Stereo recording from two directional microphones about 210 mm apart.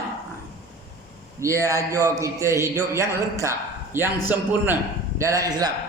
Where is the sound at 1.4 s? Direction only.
15° right (ahead or behind).